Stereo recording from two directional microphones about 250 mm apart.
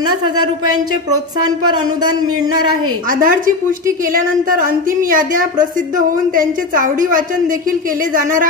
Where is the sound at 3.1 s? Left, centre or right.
Right.